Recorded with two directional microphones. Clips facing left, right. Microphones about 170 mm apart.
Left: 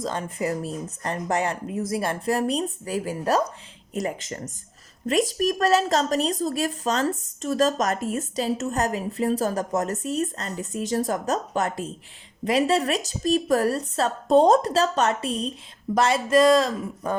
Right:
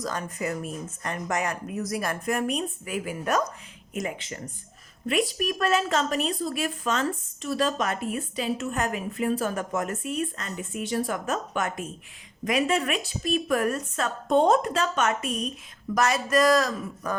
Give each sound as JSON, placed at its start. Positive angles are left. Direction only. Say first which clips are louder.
{"t": 0.0, "sound": "a woman's voice", "louder": "left 3 dB", "side_deg": 25}